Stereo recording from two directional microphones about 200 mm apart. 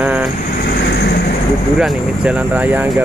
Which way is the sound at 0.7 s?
55° left (ahead or behind).